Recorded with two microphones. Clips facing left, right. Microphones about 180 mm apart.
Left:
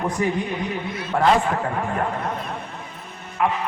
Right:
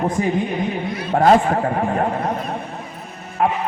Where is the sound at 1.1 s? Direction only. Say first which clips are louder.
Right 5 dB; 45° right (ahead or behind).